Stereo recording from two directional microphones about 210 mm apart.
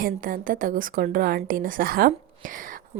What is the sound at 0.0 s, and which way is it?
A woman's voice, 40° right (ahead or behind).